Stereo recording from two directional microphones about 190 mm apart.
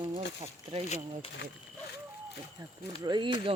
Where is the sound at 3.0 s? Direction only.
20° right (ahead or behind).